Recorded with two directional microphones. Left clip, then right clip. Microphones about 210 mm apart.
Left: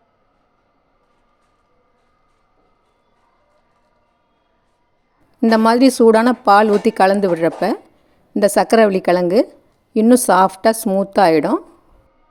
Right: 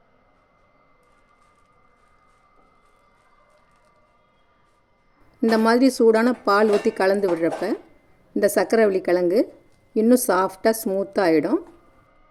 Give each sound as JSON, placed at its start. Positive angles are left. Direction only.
{"t": 5.4, "sound": "speech", "side_deg": 35}